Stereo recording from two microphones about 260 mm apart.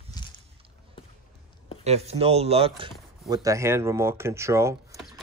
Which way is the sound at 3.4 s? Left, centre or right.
Centre.